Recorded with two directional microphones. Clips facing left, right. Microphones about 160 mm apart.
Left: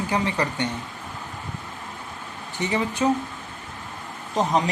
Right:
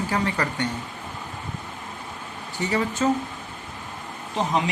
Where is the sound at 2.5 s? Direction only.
20° left (ahead or behind).